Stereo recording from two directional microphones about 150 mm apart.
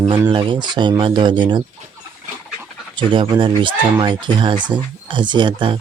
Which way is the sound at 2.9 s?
35° right (ahead or behind).